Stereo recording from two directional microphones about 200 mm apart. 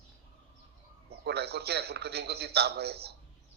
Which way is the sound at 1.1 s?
55° right (ahead or behind).